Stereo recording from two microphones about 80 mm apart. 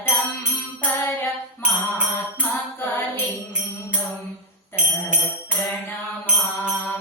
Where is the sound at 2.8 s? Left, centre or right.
Left.